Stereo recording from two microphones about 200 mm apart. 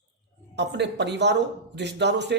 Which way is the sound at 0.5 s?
60° right (ahead or behind).